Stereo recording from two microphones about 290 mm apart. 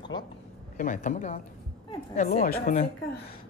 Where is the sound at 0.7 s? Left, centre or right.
Left.